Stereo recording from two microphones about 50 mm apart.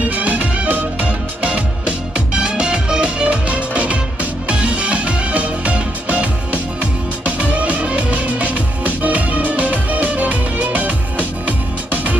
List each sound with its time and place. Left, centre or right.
0.1 s music: right